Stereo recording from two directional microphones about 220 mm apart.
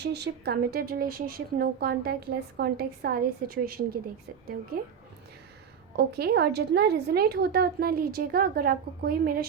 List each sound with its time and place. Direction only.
0.0 s a woman's voice: 50° right (ahead or behind)
6.0 s a woman's voice: 45° right (ahead or behind)